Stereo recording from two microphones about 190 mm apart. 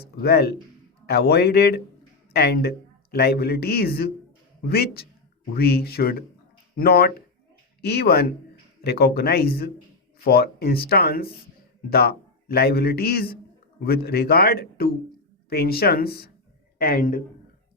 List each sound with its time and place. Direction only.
0.0 s a man's voice: 55° left (ahead or behind)